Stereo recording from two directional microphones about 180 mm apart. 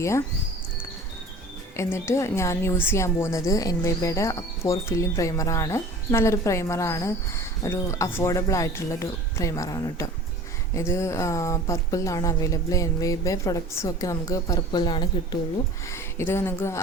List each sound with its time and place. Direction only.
1.7 s a woman's voice: 15° left (ahead or behind)
15.9 s a woman's voice: 15° left (ahead or behind)